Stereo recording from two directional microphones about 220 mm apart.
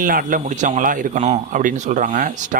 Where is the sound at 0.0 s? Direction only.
40° right (ahead or behind).